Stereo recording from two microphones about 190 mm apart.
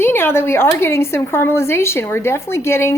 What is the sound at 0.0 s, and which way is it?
A woman's voice, 10° left (ahead or behind).